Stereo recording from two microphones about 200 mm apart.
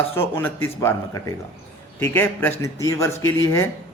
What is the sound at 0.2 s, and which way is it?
Speech, 10° left (ahead or behind).